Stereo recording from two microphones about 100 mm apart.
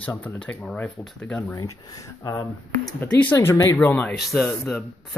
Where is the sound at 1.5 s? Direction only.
35° left (ahead or behind).